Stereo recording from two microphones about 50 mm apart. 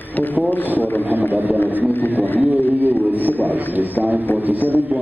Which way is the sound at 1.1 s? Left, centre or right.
Right.